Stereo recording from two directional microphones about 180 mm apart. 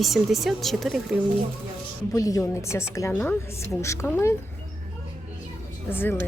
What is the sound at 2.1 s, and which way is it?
A woman's voice, 20° left (ahead or behind).